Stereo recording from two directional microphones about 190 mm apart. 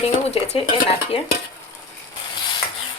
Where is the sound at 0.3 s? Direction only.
35° left (ahead or behind).